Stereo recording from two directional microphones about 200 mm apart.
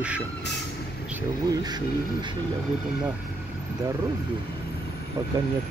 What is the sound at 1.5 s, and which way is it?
Speech, 20° right (ahead or behind).